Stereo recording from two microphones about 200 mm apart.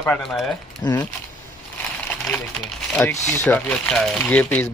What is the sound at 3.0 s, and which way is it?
Speech, 10° left (ahead or behind).